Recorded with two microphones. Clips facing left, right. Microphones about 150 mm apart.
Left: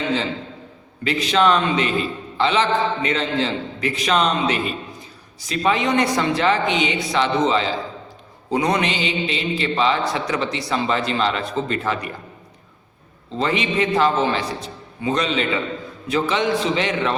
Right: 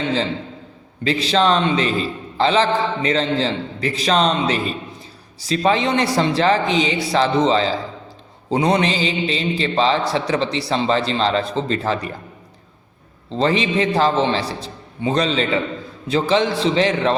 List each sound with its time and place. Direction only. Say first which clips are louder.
1.0 s a man's voice: right 1 dB; 30° right (ahead or behind)
13.3 s a man's voice: right 3 dB; 35° right (ahead or behind)